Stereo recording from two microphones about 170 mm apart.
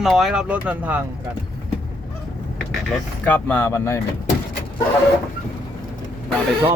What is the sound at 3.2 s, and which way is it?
Speech, 10° left (ahead or behind).